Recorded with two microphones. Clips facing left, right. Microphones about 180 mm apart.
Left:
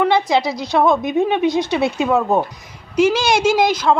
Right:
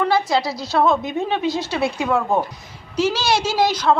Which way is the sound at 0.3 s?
20° left (ahead or behind).